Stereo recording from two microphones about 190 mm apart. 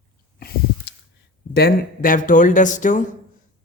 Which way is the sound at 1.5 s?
55° left (ahead or behind).